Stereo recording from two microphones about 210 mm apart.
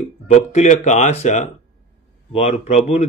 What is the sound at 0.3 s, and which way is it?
Speech, 35° left (ahead or behind).